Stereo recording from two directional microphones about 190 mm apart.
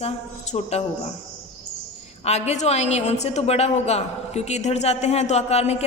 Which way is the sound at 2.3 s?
35° left (ahead or behind).